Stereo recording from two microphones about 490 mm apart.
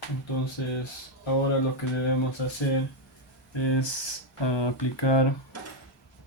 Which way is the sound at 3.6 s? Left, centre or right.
Left.